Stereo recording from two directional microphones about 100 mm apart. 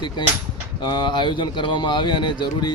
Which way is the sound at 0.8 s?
50° left (ahead or behind).